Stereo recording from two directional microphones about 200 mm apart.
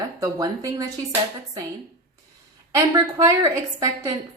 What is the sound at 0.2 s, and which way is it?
Speech, 15° right (ahead or behind).